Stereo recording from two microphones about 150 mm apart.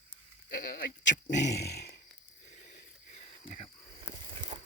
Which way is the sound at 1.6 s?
90° left.